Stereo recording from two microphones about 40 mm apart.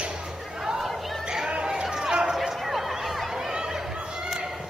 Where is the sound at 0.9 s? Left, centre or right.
Centre.